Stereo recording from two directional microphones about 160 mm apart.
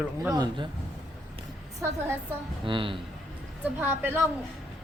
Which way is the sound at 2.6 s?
30° right (ahead or behind).